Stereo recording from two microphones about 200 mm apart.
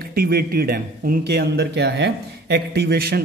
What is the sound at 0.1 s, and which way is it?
Speech, 50° right (ahead or behind).